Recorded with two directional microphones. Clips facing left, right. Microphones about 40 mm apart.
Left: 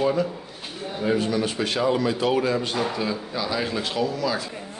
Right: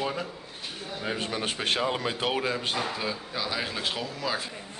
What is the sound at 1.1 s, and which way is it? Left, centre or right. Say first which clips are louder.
A man's voice: left 8 dB; right.